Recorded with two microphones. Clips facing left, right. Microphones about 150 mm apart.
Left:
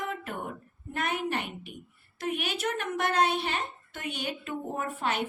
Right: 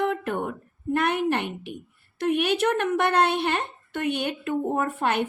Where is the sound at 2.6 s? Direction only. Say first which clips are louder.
Right 8 dB; 65° right (ahead or behind).